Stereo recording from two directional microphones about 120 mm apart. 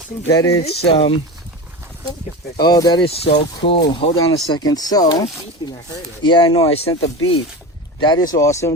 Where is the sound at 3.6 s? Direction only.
50° left (ahead or behind).